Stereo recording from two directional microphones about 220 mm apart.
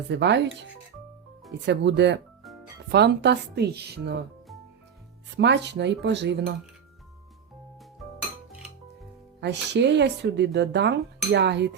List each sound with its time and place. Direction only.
0.1 s speech: 50° right (ahead or behind)
1.6 s speech: 50° right (ahead or behind)
5.4 s speech: 50° right (ahead or behind)
9.4 s speech: 50° right (ahead or behind)